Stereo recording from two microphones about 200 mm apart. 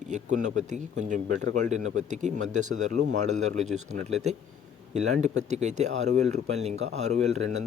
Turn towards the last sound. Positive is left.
turn(degrees=-35)  # may be behind; listen again after turning